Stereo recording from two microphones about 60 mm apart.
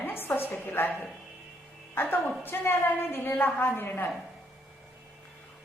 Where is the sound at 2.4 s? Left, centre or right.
Left.